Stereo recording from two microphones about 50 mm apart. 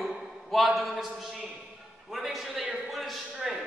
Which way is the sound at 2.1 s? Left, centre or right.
Centre.